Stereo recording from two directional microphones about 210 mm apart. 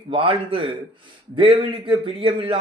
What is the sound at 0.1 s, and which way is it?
A man's voice, 25° right (ahead or behind).